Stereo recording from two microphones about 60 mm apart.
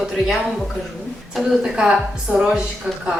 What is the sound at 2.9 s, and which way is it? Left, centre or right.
Speech, right.